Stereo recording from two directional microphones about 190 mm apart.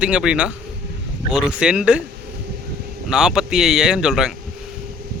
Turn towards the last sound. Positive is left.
turn(degrees=0)  # may be behind; listen again after turning